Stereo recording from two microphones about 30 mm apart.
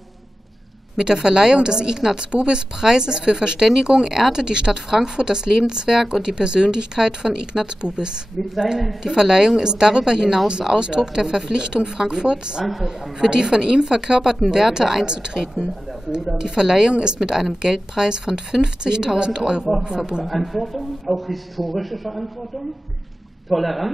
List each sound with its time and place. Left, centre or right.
0.9 s a woman's voice: right
6.2 s a woman's voice: right
10.7 s speech: right
11.0 s a woman's voice: centre
20.2 s a man's voice: centre
23.5 s a man's voice: centre